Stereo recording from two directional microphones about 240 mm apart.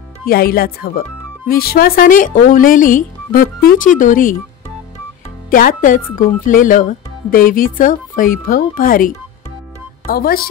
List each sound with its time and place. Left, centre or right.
0.2 s speech: left
5.5 s speech: left